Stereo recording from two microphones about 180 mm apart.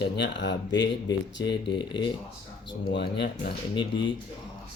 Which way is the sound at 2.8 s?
75° left (ahead or behind).